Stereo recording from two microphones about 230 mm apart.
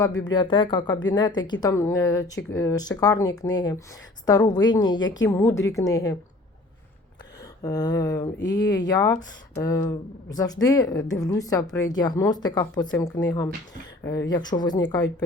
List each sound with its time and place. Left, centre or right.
0.0 s speech: centre
4.9 s a woman's voice: left
5.2 s speech: centre
7.6 s speech: centre
8.4 s speech: left
8.6 s speech: centre
14.3 s speech: centre